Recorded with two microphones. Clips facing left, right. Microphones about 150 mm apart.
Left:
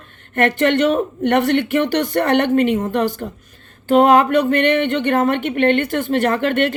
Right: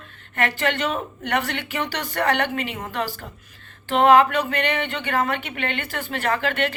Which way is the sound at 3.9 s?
45° left (ahead or behind).